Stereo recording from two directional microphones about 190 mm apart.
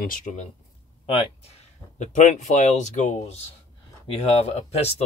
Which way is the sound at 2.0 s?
40° left (ahead or behind).